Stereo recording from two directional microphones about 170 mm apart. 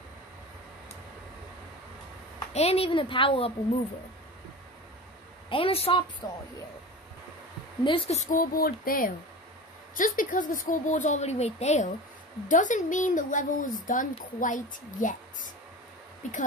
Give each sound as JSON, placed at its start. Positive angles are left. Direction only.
{"t": 2.5, "sound": "a woman's voice", "side_deg": 35}
{"t": 5.5, "sound": "a woman's voice", "side_deg": 35}
{"t": 7.8, "sound": "speech", "side_deg": 35}